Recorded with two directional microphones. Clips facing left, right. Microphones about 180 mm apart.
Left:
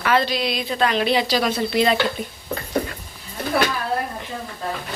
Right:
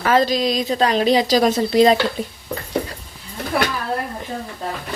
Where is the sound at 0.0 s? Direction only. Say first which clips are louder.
Right 4 dB; 40° right (ahead or behind).